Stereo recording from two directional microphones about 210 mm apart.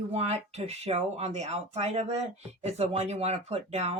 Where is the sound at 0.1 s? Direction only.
30° right (ahead or behind).